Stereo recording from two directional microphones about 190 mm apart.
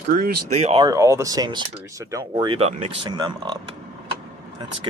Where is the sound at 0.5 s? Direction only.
35° right (ahead or behind).